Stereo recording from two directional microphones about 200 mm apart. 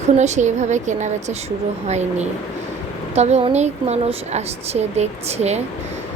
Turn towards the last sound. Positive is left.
turn(degrees=-35)  # may be behind; listen again after turning